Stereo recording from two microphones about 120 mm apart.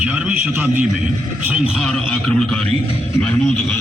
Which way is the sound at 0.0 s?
10° right (ahead or behind).